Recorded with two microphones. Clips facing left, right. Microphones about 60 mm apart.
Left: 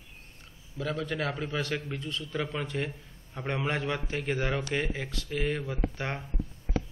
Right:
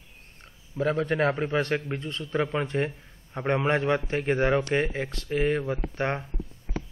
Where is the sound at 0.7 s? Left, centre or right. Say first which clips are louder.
Right 7 dB; right.